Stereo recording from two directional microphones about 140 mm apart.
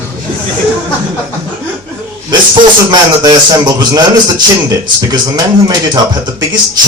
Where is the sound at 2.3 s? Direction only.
30° right (ahead or behind).